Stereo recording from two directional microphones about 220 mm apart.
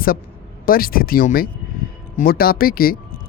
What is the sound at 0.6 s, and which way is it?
Speech, 40° left (ahead or behind).